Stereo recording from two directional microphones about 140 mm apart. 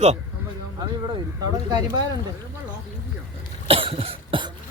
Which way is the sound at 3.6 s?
40° right (ahead or behind).